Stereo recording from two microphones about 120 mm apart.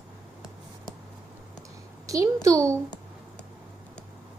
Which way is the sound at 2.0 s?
25° right (ahead or behind).